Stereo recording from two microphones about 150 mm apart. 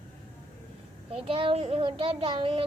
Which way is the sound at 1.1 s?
40° right (ahead or behind).